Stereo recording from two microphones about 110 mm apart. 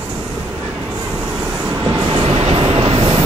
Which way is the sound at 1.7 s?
35° right (ahead or behind).